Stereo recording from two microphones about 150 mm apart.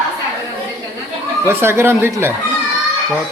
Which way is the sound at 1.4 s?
15° right (ahead or behind).